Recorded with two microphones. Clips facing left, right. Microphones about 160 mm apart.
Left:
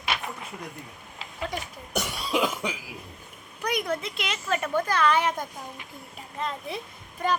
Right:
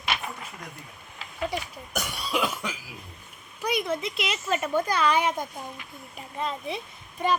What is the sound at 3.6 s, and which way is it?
A woman's voice, 5° right (ahead or behind).